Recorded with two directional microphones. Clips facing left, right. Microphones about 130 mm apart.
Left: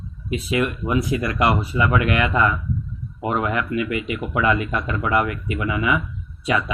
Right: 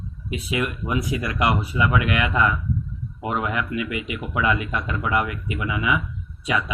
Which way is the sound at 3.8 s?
15° right (ahead or behind).